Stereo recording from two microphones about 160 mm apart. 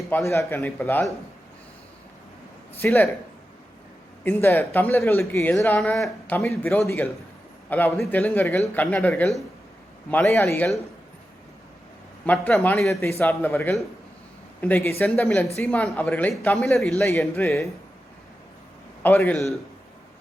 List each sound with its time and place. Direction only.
0.3 s a woman's voice: 20° left (ahead or behind)
2.8 s a woman's voice: 15° left (ahead or behind)
4.2 s a woman's voice: 15° left (ahead or behind)
12.2 s a woman's voice: 10° left (ahead or behind)
12.9 s a woman's voice: 15° left (ahead or behind)
17.1 s a woman's voice: 15° left (ahead or behind)
19.0 s a woman's voice: 10° left (ahead or behind)